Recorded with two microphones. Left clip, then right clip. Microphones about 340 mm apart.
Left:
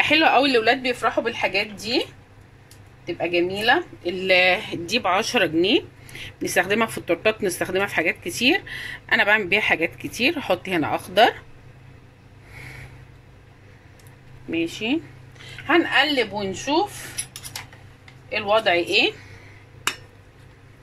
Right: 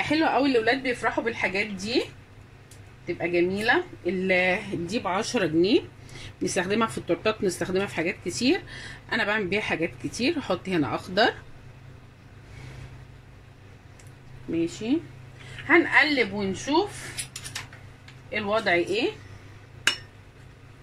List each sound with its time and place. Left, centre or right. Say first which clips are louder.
0.0 s speech: left 6 dB; left
3.1 s speech: left 2 dB; left
14.5 s speech: left 3 dB; left
18.3 s speech: left 5 dB; left